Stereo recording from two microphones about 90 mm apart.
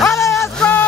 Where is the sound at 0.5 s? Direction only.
15° left (ahead or behind).